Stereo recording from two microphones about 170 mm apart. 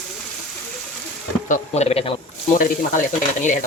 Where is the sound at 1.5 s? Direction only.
40° left (ahead or behind).